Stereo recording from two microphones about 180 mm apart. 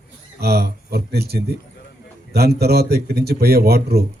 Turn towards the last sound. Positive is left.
turn(degrees=-60)  # may be behind; listen again after turning